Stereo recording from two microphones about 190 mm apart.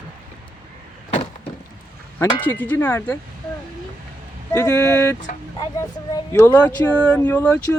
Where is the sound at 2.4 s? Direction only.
10° left (ahead or behind).